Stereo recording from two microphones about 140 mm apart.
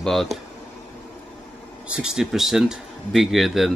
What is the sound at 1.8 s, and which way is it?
Speech, 5° right (ahead or behind).